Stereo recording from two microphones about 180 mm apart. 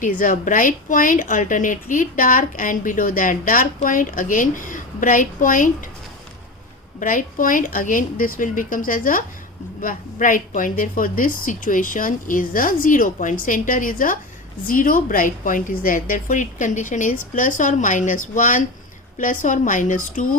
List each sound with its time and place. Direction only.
0.0 s a woman's voice: 45° left (ahead or behind)
7.0 s a woman's voice: 50° left (ahead or behind)